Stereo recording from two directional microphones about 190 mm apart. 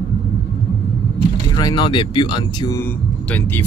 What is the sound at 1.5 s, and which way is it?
Speech, 20° left (ahead or behind).